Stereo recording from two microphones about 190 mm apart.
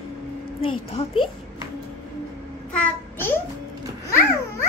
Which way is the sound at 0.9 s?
30° left (ahead or behind).